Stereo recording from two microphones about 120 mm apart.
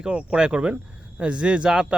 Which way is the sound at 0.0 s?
10° right (ahead or behind).